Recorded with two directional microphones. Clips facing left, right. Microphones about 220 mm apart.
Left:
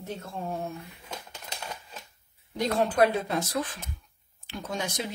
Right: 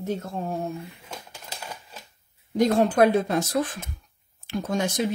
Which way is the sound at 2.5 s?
45° right (ahead or behind).